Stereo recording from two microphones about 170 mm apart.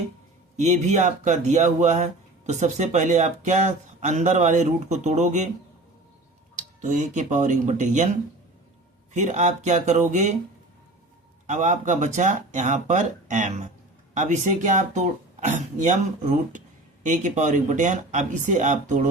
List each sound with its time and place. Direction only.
0.6 s speech: 45° right (ahead or behind)
6.6 s speech: 45° right (ahead or behind)
9.1 s speech: 45° right (ahead or behind)
11.4 s speech: 45° right (ahead or behind)